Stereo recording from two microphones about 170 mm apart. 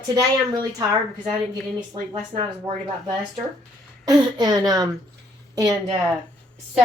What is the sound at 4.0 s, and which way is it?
Speech, 20° right (ahead or behind).